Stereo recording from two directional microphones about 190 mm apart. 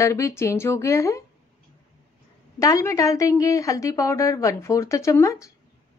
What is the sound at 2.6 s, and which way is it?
Speech, 15° left (ahead or behind).